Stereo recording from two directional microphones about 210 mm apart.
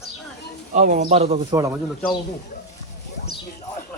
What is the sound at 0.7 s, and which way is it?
Speech, 35° right (ahead or behind).